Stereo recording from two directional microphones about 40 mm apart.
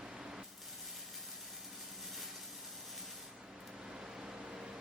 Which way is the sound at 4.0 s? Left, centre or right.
Centre.